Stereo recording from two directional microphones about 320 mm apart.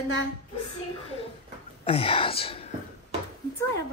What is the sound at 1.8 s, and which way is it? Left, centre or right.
Speech, centre.